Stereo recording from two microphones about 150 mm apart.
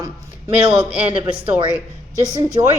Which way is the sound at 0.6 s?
5° right (ahead or behind).